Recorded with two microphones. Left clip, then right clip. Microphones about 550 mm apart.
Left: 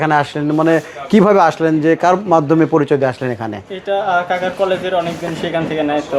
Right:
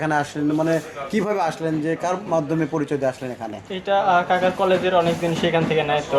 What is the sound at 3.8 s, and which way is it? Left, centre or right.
Speech, right.